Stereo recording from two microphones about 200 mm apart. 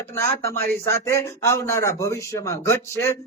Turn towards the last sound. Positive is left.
turn(degrees=10)  # may be behind; listen again after turning